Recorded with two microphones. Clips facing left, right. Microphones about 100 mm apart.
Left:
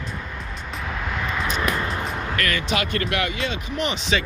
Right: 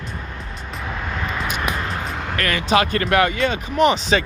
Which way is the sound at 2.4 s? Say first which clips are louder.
Right 7 dB; 35° right (ahead or behind).